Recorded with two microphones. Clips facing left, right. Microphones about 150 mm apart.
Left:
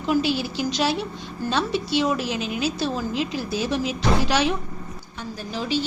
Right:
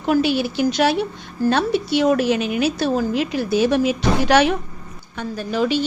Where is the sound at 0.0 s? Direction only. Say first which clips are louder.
Right 4 dB; 60° right (ahead or behind).